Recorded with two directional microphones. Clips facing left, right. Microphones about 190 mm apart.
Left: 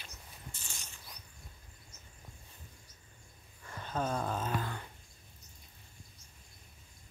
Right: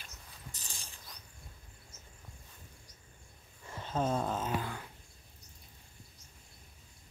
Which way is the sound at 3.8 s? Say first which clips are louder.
Right 2 dB; 25° right (ahead or behind).